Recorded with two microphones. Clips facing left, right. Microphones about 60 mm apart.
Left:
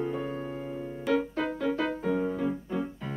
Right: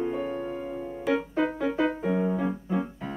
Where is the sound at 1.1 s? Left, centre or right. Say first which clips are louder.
Right 2 dB; centre.